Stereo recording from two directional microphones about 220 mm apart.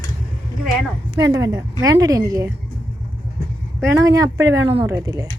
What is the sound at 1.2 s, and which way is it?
Speech, 15° right (ahead or behind).